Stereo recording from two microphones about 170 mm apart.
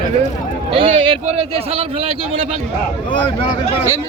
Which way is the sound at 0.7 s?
35° right (ahead or behind).